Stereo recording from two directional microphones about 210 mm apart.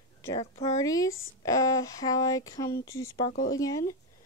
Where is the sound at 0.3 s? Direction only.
20° left (ahead or behind).